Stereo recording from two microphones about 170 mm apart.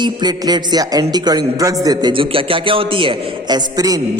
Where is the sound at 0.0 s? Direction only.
25° right (ahead or behind).